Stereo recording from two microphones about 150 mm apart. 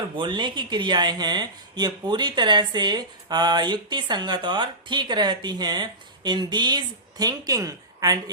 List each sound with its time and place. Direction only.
0.2 s speech: 30° right (ahead or behind)